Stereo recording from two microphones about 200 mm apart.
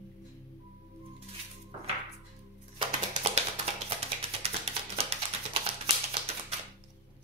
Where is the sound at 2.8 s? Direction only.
30° right (ahead or behind).